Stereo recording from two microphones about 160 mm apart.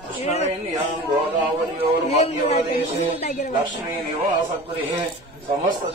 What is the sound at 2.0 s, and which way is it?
Speech, 40° left (ahead or behind).